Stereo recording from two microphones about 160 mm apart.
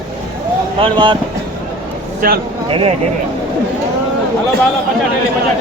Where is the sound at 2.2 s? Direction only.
60° right (ahead or behind).